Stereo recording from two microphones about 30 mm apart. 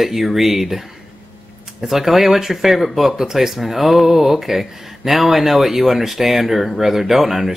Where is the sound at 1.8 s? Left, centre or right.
Centre.